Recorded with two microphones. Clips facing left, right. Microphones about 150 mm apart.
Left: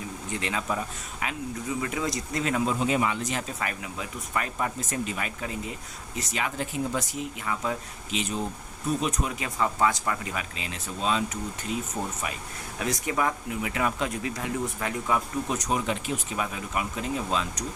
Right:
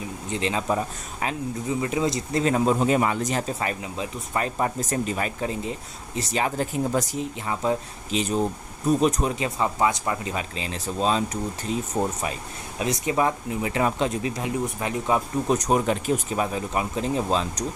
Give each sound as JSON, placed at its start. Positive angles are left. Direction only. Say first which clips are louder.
{"t": 0.3, "sound": "speech", "louder": "right 5 dB", "side_deg": -25}
{"t": 1.8, "sound": "speech", "louder": "right 7 dB", "side_deg": -25}
{"t": 3.6, "sound": "speech", "louder": "right 5 dB", "side_deg": -25}
{"t": 12.8, "sound": "speech", "louder": "right 4 dB", "side_deg": -20}
{"t": 15.4, "sound": "speech", "louder": "right 6 dB", "side_deg": -40}